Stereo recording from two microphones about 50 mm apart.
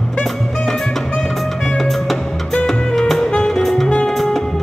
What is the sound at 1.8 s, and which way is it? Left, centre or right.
Music, centre.